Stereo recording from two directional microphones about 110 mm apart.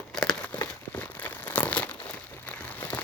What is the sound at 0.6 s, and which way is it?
Crumpling, 15° left (ahead or behind).